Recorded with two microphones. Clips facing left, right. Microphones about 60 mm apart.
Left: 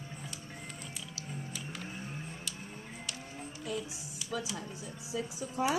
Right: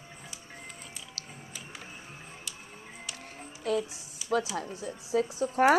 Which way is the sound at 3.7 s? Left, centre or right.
Right.